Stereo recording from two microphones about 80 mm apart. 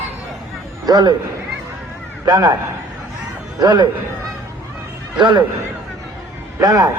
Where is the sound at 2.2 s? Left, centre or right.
Right.